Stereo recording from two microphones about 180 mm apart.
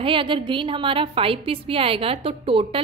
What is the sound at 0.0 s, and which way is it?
A woman's voice, 30° right (ahead or behind).